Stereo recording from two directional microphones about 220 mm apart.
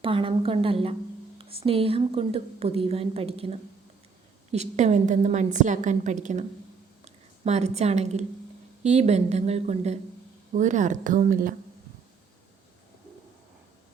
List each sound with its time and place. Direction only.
0.0 s a woman's voice: 25° right (ahead or behind); by 11.5 s 40° right (ahead or behind)